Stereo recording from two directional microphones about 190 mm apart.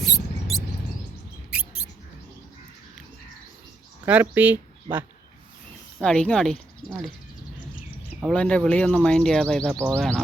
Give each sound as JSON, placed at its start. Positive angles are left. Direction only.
{"t": 0.0, "sound": "mouse", "side_deg": 0}
{"t": 4.0, "sound": "speech", "side_deg": -10}
{"t": 6.0, "sound": "speech", "side_deg": 5}
{"t": 8.2, "sound": "speech", "side_deg": 5}
{"t": 9.7, "sound": "speech", "side_deg": -15}
{"t": 10.0, "sound": "speech", "side_deg": 0}